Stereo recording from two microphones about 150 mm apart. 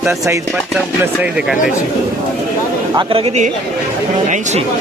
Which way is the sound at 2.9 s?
40° right (ahead or behind).